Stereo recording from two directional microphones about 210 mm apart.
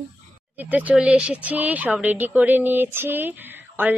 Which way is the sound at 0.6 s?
5° right (ahead or behind).